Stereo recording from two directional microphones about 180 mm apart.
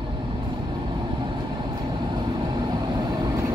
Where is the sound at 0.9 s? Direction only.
25° right (ahead or behind).